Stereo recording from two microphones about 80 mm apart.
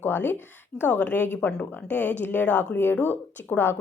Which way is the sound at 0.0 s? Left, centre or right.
Left.